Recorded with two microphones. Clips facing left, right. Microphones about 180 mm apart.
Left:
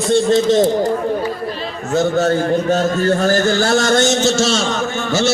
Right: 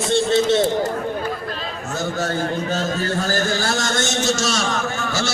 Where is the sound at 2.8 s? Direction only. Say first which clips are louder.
Left 7 dB; 55° left (ahead or behind).